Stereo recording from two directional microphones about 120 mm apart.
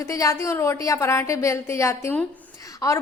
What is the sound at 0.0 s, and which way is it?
A woman's voice, 25° left (ahead or behind).